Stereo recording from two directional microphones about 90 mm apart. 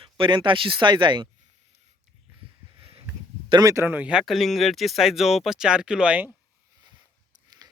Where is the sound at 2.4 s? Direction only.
90° right.